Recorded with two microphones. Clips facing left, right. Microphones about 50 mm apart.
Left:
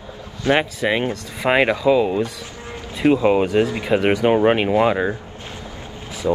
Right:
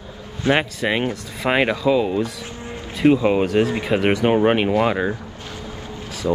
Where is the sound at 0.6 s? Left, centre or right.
Centre.